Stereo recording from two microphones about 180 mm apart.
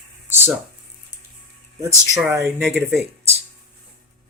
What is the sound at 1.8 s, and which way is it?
Speech, 15° right (ahead or behind).